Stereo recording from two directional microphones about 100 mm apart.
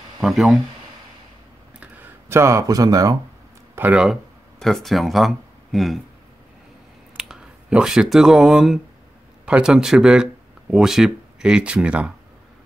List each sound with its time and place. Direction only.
0.2 s speech: centre (ahead or behind)
2.2 s speech: 30° right (ahead or behind)
3.7 s speech: 20° right (ahead or behind)
4.0 s speech: centre (ahead or behind)
7.2 s speech: 10° right (ahead or behind)